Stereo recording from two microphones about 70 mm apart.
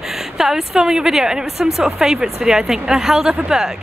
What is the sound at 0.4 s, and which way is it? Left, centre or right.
Speech, centre.